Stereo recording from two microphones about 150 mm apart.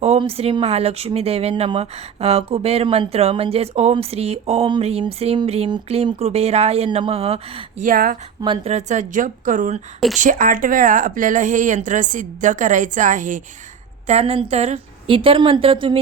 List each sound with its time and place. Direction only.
0.2 s speech: 40° right (ahead or behind)
7.9 s speech: 70° right (ahead or behind)
8.6 s a woman's voice: 50° right (ahead or behind)
14.1 s speech: 45° right (ahead or behind)